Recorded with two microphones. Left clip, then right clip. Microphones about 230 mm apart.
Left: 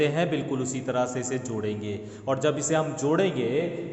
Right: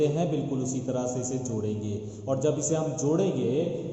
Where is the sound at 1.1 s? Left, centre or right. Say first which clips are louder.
Left 1 dB; left.